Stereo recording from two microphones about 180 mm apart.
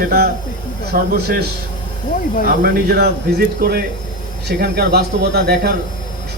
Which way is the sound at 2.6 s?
60° right (ahead or behind).